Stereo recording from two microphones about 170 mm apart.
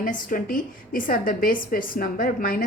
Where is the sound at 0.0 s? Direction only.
55° left (ahead or behind).